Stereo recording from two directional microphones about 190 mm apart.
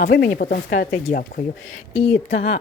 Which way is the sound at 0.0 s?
45° left (ahead or behind).